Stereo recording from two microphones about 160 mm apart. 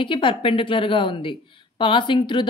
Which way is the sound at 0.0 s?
35° left (ahead or behind).